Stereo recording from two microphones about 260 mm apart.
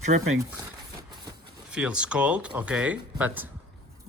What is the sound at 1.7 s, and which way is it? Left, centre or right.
Speech, centre.